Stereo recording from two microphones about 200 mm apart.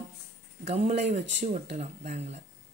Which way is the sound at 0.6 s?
30° right (ahead or behind).